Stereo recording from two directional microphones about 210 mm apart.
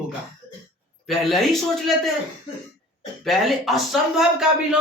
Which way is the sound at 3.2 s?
Centre (ahead or behind).